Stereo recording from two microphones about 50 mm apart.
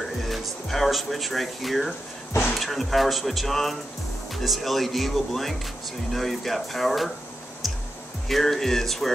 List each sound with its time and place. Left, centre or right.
0.2 s speech: centre
8.3 s speech: centre